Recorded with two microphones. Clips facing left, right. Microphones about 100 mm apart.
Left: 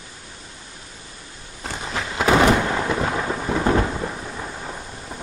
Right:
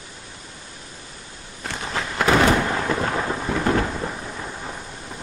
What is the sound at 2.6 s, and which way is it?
Thunder, 5° left (ahead or behind).